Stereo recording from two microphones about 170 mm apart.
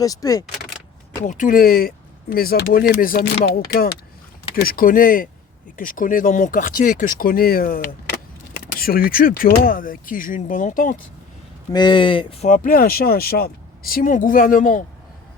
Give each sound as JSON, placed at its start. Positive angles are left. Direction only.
{"t": 0.0, "sound": "speech", "side_deg": 20}
{"t": 1.2, "sound": "speech", "side_deg": 50}
{"t": 11.7, "sound": "speech", "side_deg": 25}
{"t": 12.5, "sound": "speech", "side_deg": 55}